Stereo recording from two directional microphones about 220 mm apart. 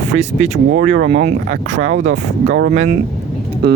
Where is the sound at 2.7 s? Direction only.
30° right (ahead or behind).